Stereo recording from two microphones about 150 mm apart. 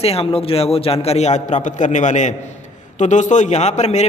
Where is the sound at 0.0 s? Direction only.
40° left (ahead or behind).